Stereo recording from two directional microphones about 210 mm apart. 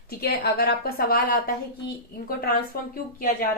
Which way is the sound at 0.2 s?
50° left (ahead or behind).